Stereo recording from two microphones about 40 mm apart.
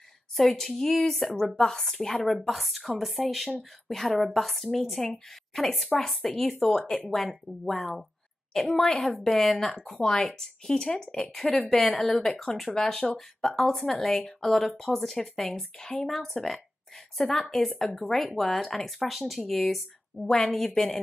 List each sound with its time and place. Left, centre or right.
0.4 s a woman's voice: centre
7.6 s a woman's voice: centre
9.8 s a woman's voice: centre